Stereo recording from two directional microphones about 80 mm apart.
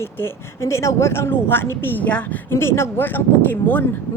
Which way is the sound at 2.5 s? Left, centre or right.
Left.